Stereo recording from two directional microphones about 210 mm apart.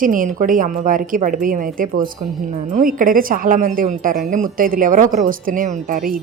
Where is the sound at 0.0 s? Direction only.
40° right (ahead or behind).